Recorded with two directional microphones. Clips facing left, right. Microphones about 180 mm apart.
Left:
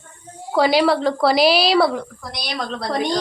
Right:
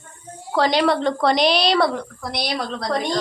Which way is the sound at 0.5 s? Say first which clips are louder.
Left 2 dB; 10° left (ahead or behind).